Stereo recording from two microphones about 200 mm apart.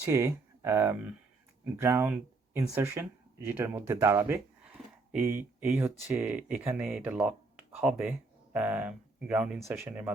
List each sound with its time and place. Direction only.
0.0 s speech: 15° right (ahead or behind)